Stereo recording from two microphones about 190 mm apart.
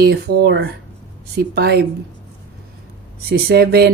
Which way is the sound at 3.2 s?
55° right (ahead or behind).